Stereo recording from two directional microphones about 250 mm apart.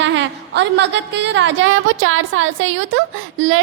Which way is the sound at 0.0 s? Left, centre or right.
Right.